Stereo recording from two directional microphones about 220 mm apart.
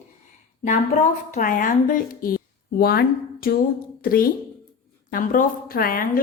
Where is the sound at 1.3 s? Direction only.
40° left (ahead or behind).